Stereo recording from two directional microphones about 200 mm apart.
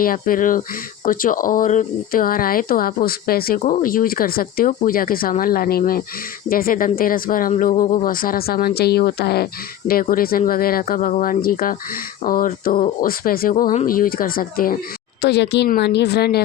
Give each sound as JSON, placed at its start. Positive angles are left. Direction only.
{"t": 0.0, "sound": "a woman's voice", "side_deg": 45}